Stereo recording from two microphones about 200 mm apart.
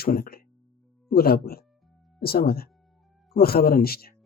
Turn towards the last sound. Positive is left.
turn(degrees=50)  # may be behind; listen again after turning